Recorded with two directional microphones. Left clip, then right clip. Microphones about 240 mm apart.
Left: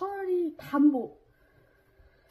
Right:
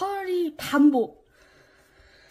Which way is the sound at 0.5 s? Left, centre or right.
Right.